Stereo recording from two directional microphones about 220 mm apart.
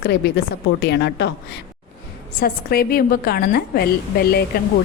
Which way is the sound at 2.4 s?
45° left (ahead or behind).